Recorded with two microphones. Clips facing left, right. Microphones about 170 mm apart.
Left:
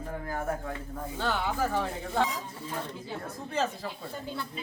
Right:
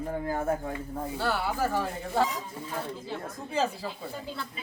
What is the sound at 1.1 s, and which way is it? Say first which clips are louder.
Speech: even; 5° right (ahead or behind).